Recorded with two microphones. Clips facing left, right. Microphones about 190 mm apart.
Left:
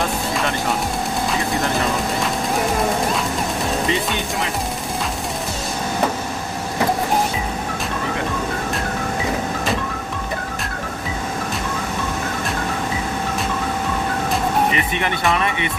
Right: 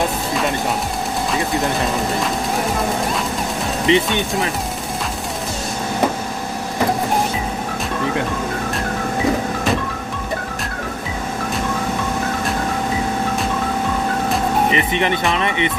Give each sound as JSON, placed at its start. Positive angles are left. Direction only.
{"t": 3.9, "sound": "speech", "side_deg": -20}
{"t": 14.7, "sound": "speech", "side_deg": -20}